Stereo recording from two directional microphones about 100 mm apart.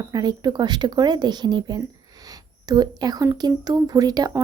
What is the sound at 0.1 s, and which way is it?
Speech, 45° right (ahead or behind).